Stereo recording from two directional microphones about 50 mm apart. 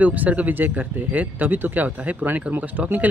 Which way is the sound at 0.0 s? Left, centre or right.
Right.